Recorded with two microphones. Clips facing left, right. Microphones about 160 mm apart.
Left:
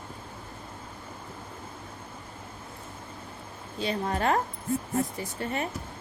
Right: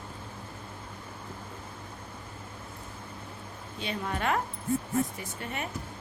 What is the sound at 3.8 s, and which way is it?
A woman's voice, 35° left (ahead or behind).